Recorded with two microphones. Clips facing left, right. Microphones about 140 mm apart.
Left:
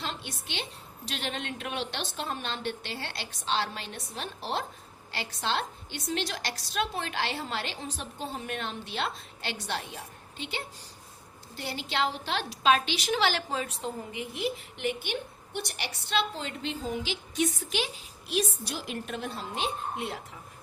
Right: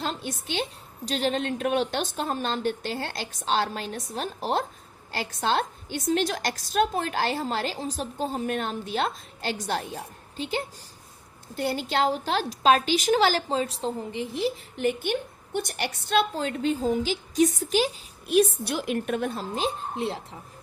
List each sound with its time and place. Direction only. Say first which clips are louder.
0.0 s a woman's voice: right 6 dB; 45° right (ahead or behind)
19.5 s speech: right 2 dB; 35° right (ahead or behind)